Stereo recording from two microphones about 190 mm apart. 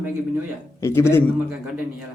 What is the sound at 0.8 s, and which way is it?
Speech, 15° left (ahead or behind).